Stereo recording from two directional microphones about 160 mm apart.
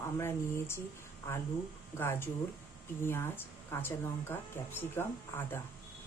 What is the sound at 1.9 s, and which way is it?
Speech, 15° left (ahead or behind).